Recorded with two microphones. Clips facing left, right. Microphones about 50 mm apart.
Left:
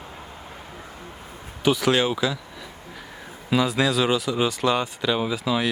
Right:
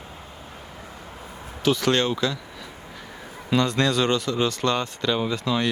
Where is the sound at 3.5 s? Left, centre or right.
Centre.